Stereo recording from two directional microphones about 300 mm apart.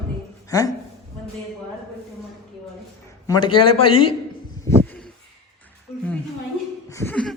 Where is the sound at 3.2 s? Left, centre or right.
Centre.